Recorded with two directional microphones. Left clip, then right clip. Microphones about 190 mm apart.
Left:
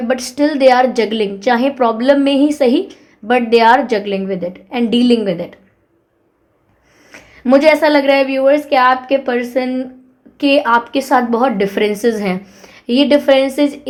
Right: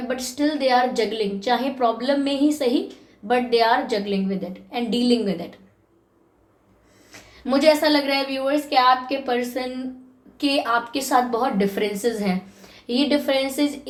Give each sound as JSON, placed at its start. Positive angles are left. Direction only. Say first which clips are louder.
{"t": 0.1, "sound": "a woman's voice", "louder": "left 9 dB", "side_deg": 50}
{"t": 7.1, "sound": "a woman's voice", "louder": "left 11 dB", "side_deg": 50}